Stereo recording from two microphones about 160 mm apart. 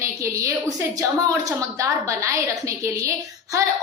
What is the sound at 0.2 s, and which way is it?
A woman's voice, 20° right (ahead or behind).